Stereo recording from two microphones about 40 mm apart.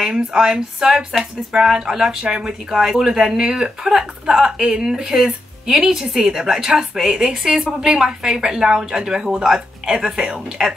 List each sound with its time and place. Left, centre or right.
0.0 s speech: centre